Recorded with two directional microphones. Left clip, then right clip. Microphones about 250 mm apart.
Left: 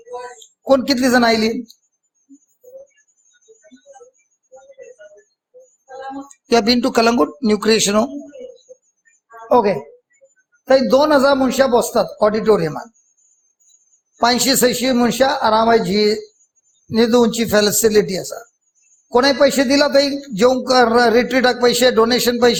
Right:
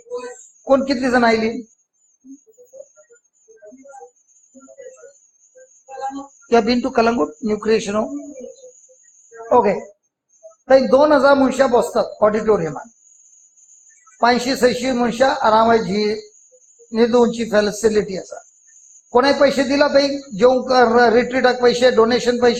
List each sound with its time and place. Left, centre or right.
0.7 s a man's voice: left
6.5 s speech: left
9.5 s a man's voice: left
14.2 s a man's voice: left